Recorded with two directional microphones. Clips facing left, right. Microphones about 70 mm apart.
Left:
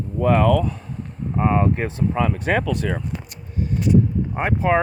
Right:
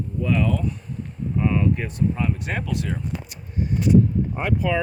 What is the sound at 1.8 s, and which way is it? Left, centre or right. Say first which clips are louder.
Speech: left 3 dB; left.